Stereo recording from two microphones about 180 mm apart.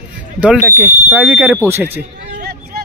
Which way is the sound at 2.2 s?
60° right (ahead or behind).